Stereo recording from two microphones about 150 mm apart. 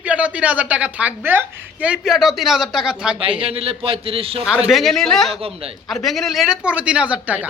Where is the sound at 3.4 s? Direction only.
40° right (ahead or behind).